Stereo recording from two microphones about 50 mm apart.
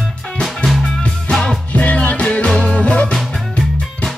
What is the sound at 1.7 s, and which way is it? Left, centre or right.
Music, left.